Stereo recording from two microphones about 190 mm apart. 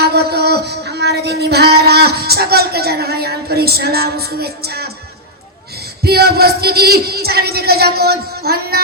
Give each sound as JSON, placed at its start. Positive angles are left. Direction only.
{"t": 0.0, "sound": "music", "side_deg": -55}
{"t": 6.0, "sound": "speech", "side_deg": -55}